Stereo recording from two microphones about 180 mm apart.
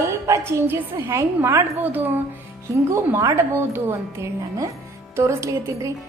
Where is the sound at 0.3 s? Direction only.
15° right (ahead or behind).